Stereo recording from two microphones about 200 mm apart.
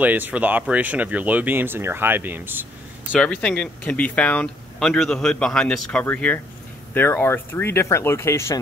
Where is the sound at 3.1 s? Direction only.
5° left (ahead or behind).